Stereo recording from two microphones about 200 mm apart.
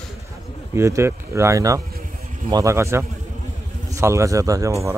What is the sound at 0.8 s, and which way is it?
A man's voice, 15° right (ahead or behind).